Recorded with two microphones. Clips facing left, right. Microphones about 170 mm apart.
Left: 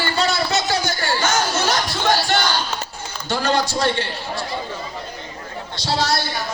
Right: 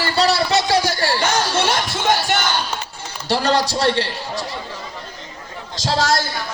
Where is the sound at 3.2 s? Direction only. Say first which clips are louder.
Right 2 dB; 35° right (ahead or behind).